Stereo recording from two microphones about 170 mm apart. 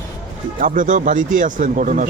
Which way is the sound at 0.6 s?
50° right (ahead or behind).